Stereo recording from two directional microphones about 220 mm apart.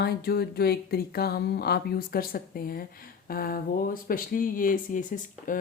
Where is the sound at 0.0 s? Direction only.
45° left (ahead or behind).